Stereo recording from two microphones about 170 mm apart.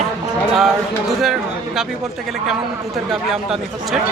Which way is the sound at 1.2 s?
Centre (ahead or behind).